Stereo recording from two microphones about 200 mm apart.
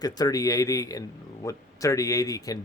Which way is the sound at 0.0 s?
20° left (ahead or behind).